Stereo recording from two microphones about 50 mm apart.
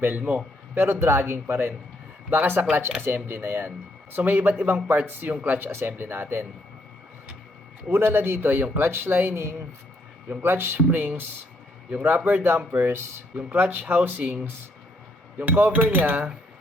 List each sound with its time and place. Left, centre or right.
0.0 s speech: right
0.7 s speech: right
4.1 s speech: right
7.9 s speech: right
10.2 s speech: right
11.9 s a man's voice: right
12.1 s speech: right
14.2 s speech: right
15.4 s speech: right